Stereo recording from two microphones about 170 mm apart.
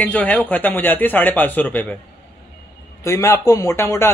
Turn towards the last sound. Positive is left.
turn(degrees=15)  # may be behind; listen again after turning